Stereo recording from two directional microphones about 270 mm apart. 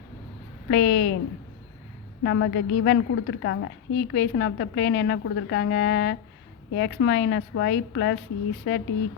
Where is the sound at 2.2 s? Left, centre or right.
Left.